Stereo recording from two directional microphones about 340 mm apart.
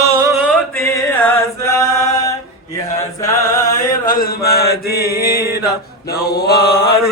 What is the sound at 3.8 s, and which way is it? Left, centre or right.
Mantra, left.